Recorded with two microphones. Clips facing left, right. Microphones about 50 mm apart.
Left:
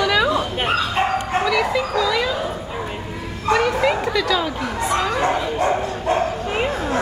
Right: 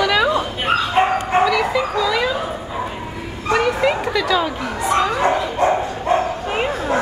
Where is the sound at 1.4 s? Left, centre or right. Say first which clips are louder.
Right 1 dB; centre.